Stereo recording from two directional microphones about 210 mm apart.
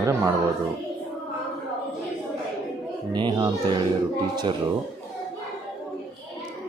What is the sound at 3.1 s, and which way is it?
Speech, 20° right (ahead or behind).